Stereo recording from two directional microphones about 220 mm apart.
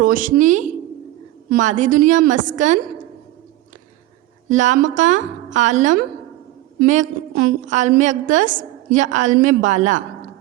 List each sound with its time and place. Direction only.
0.0 s a woman's voice: 40° right (ahead or behind)
4.4 s a woman's voice: 35° right (ahead or behind)